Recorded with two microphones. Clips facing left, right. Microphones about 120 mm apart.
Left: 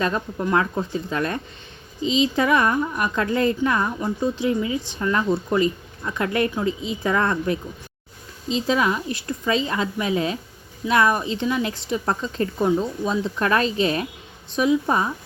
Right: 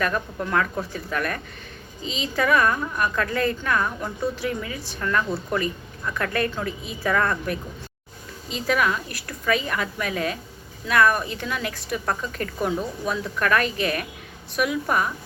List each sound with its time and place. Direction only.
0.0 s speech: 25° left (ahead or behind)